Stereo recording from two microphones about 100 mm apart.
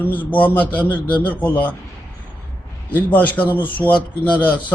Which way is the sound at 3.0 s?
20° left (ahead or behind).